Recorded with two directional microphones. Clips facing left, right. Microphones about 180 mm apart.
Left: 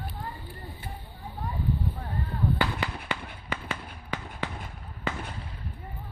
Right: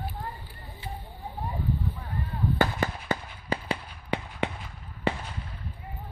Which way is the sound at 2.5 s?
45° right (ahead or behind).